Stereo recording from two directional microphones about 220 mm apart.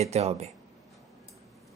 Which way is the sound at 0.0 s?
30° right (ahead or behind).